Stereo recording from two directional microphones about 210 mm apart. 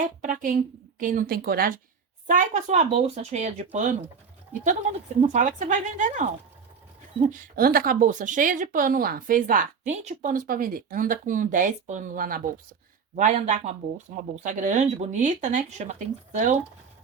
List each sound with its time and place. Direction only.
0.2 s speech: 40° right (ahead or behind)